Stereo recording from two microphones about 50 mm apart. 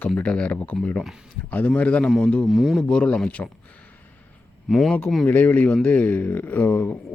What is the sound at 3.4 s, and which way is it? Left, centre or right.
Speech, left.